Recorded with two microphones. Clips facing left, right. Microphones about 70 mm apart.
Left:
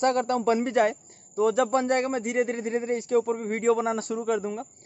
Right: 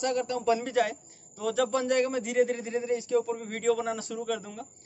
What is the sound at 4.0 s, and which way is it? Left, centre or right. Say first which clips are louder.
Speech: left 6 dB; left.